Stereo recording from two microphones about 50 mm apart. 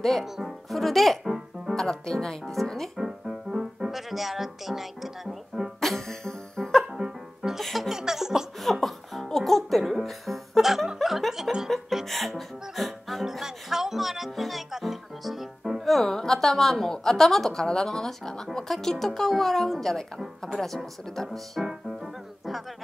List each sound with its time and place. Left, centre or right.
0.5 s speech: centre
1.8 s speech: centre
3.0 s music: centre
5.8 s music: centre
6.9 s music: centre
7.6 s music: centre
7.9 s music: centre
20.5 s speech: centre
21.6 s music: centre